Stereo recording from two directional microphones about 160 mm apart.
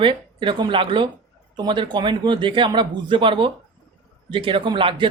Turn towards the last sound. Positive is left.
turn(degrees=-30)  # may be behind; listen again after turning